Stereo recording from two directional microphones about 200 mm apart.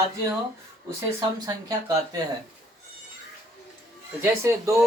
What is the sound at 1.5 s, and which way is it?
Speech, 15° right (ahead or behind).